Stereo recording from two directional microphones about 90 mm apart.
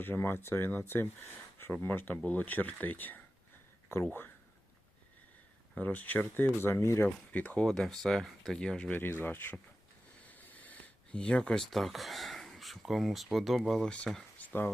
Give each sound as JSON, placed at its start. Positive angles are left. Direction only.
{"t": 0.0, "sound": "speech", "side_deg": 25}
{"t": 5.7, "sound": "speech", "side_deg": 20}
{"t": 7.3, "sound": "speech", "side_deg": 15}
{"t": 7.6, "sound": "speech", "side_deg": 5}
{"t": 8.9, "sound": "speech", "side_deg": 25}
{"t": 14.3, "sound": "a sound", "side_deg": 20}